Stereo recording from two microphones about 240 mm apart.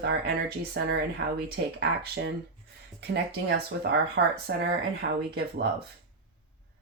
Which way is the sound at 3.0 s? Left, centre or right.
Right.